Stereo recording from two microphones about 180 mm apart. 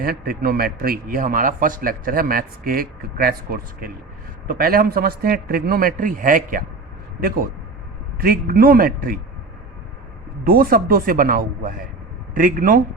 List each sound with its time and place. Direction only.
0.0 s a man's voice: 55° right (ahead or behind)
10.4 s a man's voice: 55° right (ahead or behind)